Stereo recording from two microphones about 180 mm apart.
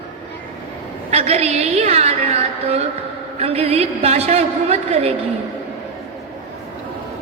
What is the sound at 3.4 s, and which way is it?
A man's voice, 35° right (ahead or behind).